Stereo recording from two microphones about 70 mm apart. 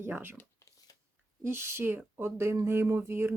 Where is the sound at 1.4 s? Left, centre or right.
Right.